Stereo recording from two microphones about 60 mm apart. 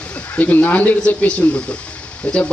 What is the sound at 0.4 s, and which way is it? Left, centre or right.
Speech, left.